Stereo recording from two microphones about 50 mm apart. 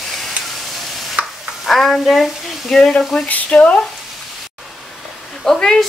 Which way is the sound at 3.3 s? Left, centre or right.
Left.